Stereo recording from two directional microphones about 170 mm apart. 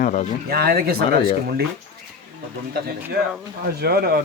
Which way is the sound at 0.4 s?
65° right (ahead or behind).